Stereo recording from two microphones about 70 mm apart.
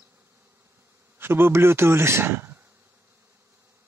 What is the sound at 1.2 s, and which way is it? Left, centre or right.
A man's voice, right.